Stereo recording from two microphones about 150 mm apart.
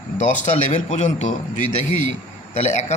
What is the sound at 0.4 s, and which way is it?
A man's voice, 50° left (ahead or behind).